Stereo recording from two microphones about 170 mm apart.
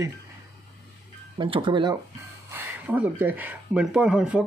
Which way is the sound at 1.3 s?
30° right (ahead or behind).